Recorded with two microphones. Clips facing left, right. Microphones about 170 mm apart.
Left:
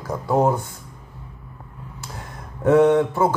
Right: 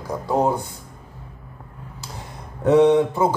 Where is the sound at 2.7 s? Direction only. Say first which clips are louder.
Right 1 dB; 15° right (ahead or behind).